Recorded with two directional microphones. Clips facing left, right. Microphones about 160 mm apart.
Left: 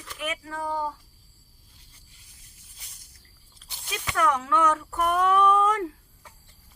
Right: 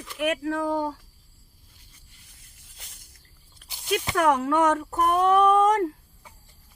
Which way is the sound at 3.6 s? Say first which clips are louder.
Right 12 dB; 60° right (ahead or behind).